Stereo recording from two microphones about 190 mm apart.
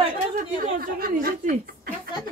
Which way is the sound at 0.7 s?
50° right (ahead or behind).